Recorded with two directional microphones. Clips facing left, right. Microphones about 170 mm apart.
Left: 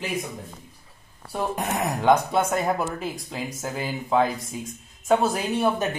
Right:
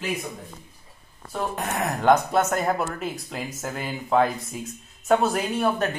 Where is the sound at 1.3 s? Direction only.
10° left (ahead or behind).